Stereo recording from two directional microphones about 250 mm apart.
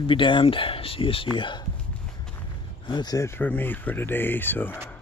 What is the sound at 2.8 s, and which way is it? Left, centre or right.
Speech, centre.